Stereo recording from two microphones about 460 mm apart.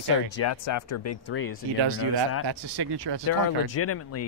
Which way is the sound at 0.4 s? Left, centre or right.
Left.